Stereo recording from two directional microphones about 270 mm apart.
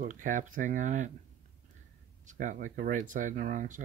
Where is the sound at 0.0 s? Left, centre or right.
Right.